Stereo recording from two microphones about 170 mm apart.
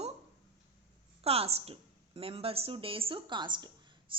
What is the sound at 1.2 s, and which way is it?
A woman's voice, 35° right (ahead or behind).